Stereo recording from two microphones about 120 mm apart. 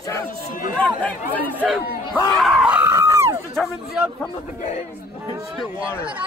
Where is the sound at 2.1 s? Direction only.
Centre (ahead or behind).